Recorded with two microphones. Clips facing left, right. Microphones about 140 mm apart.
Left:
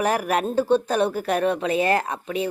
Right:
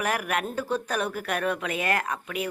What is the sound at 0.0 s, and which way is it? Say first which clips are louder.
Speech: left 6 dB; 30° left (ahead or behind).